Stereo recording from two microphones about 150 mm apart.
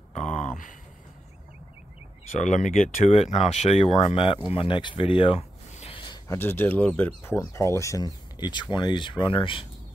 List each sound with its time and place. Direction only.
0.1 s a sound: 50° left (ahead or behind)
2.3 s speech: 55° left (ahead or behind); by 6.0 s 40° left (ahead or behind)
6.2 s speech: 15° left (ahead or behind); by 9.7 s 35° left (ahead or behind)